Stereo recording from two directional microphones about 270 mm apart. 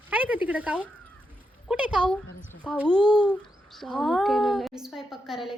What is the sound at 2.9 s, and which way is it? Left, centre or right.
Speech, centre.